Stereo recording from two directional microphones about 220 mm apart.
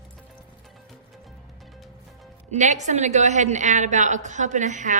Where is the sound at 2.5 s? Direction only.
30° right (ahead or behind).